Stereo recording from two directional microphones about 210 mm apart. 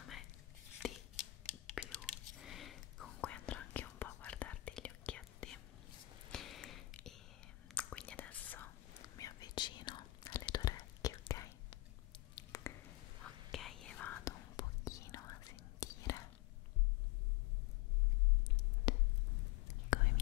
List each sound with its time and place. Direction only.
0.8 s chopping: centre (ahead or behind)
1.4 s whispering: 5° left (ahead or behind)
6.3 s a sound: centre (ahead or behind)
7.6 s whispering: 5° left (ahead or behind)
12.4 s finger snapping: 15° left (ahead or behind)
13.5 s whispering: centre (ahead or behind); by 16.2 s 15° left (ahead or behind)
18.9 s a sound: 25° left (ahead or behind)
19.9 s whispering: 40° left (ahead or behind)